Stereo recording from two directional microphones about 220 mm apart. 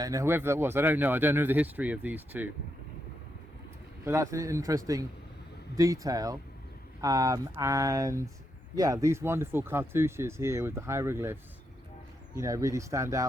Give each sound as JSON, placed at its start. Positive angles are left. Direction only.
{"t": 0.0, "sound": "speech", "side_deg": -15}
{"t": 4.0, "sound": "speech", "side_deg": -15}
{"t": 12.4, "sound": "speech", "side_deg": -15}